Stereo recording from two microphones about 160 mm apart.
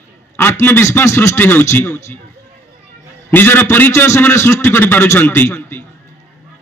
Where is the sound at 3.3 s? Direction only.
15° left (ahead or behind).